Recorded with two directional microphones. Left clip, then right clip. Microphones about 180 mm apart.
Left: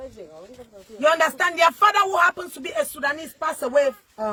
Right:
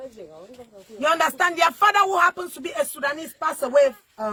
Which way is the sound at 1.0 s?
25° right (ahead or behind).